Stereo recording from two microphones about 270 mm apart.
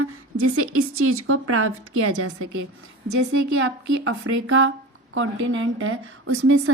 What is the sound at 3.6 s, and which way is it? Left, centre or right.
A woman's voice, right.